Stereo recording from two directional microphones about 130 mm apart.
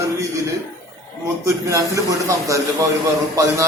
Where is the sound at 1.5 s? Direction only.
25° right (ahead or behind).